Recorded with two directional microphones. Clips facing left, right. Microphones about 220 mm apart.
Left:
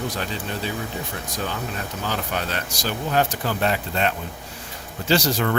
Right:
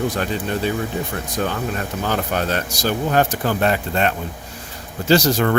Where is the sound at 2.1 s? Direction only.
45° right (ahead or behind).